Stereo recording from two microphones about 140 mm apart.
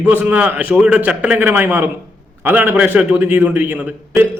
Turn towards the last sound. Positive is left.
turn(degrees=-10)  # may be behind; listen again after turning